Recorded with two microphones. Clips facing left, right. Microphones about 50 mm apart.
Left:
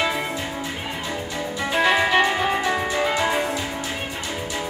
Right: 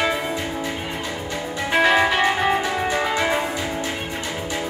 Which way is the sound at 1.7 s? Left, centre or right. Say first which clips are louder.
Right 2 dB; right.